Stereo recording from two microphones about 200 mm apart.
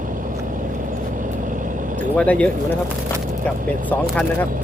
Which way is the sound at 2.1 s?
5° left (ahead or behind).